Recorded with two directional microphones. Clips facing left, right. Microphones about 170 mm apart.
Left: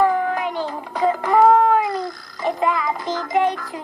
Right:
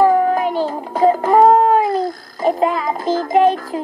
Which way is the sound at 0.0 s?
40° right (ahead or behind).